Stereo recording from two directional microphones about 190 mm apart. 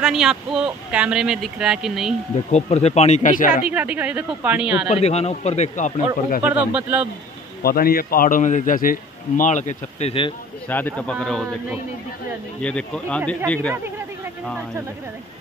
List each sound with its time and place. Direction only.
0.0 s speech: centre (ahead or behind)
2.5 s speech: 35° left (ahead or behind)
3.6 s a woman's voice: 5° right (ahead or behind)
4.8 s speech: 35° left (ahead or behind)
6.4 s a woman's voice: 5° right (ahead or behind)
7.6 s speech: 50° left (ahead or behind); by 10.3 s 30° left (ahead or behind)
10.7 s a man's voice: 10° left (ahead or behind)
12.6 s speech: 5° left (ahead or behind)